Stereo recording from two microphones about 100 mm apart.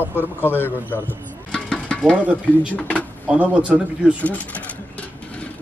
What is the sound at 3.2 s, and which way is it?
Speech, 10° right (ahead or behind).